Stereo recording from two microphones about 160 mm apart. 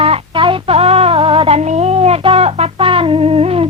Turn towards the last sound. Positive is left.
turn(degrees=-40)  # may be behind; listen again after turning